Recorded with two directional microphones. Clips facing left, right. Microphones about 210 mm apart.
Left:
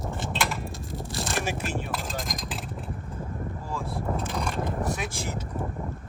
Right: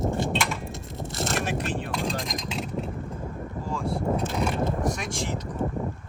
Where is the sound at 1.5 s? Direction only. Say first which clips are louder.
Right 2 dB; centre (ahead or behind).